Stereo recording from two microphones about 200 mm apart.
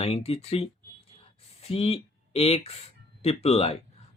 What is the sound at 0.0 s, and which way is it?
Speech, 30° left (ahead or behind).